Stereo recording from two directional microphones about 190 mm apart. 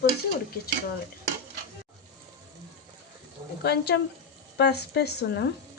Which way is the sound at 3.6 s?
60° left (ahead or behind).